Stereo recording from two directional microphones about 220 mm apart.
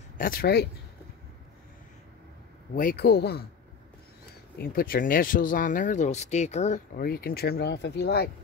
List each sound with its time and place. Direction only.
0.2 s speech: 40° left (ahead or behind)
2.7 s speech: 40° left (ahead or behind)
4.6 s speech: 40° left (ahead or behind)